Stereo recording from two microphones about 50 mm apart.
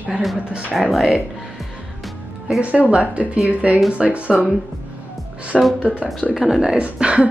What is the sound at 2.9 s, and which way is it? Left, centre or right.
Speech, right.